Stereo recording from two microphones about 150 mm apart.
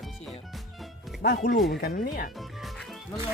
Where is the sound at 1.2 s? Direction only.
70° left (ahead or behind).